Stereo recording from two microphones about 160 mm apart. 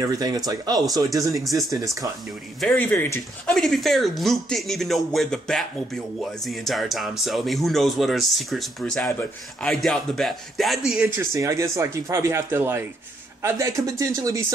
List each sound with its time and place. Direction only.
0.0 s speech: 25° right (ahead or behind)
1.4 s speech: centre (ahead or behind)
2.6 s speech: 10° left (ahead or behind)
3.4 s speech: centre (ahead or behind)
11.1 s speech: 20° right (ahead or behind)